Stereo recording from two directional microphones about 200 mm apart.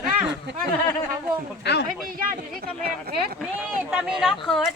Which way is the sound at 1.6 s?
60° left (ahead or behind).